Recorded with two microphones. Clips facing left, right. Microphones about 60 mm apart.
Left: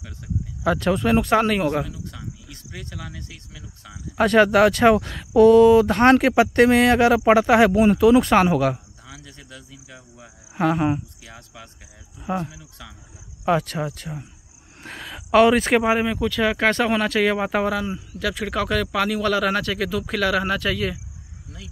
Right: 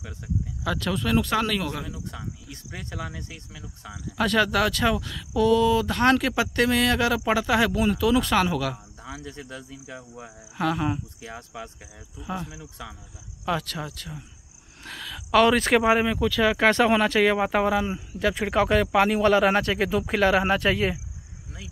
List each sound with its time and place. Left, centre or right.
0.7 s speech: left
1.9 s cricket: right
4.2 s speech: left
9.0 s speech: right
10.6 s speech: left
11.2 s speech: right
12.2 s speech: left
12.5 s speech: right
13.5 s speech: left
14.8 s a sound: left
15.3 s speech: centre
17.6 s speech: centre